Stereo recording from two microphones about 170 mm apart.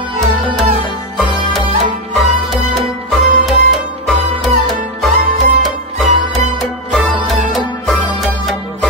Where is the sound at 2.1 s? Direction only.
Centre (ahead or behind).